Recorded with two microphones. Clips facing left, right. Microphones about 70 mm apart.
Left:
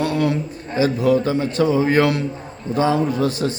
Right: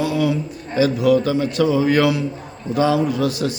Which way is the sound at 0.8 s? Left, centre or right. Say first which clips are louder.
Right 1 dB; left.